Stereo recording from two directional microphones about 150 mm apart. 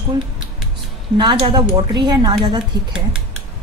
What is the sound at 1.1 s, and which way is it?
A woman's voice, 35° right (ahead or behind).